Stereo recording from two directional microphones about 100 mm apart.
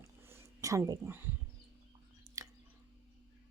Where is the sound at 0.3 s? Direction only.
30° right (ahead or behind).